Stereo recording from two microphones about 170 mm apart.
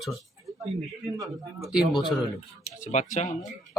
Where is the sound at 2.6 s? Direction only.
45° left (ahead or behind).